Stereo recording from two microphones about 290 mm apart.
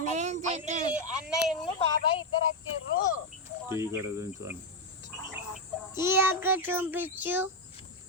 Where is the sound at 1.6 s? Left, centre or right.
Centre.